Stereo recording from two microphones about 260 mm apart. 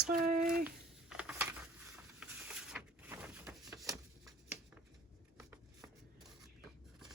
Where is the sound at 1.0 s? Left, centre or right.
Centre.